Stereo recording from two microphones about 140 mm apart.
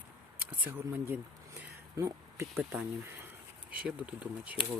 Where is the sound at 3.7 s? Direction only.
10° right (ahead or behind).